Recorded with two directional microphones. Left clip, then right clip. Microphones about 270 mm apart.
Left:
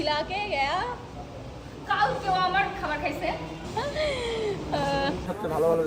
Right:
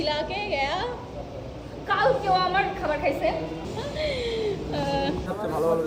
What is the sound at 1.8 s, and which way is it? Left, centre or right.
Speech, centre.